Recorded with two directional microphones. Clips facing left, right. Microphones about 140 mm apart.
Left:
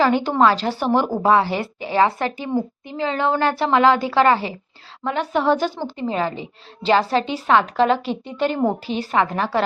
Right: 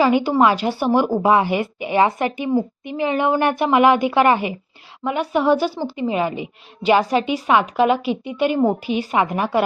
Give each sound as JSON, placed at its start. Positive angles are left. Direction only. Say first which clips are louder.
{"t": 0.0, "sound": "a woman's voice", "louder": "right 1 dB", "side_deg": -10}